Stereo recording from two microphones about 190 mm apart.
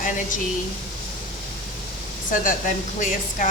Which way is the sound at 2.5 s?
45° left (ahead or behind).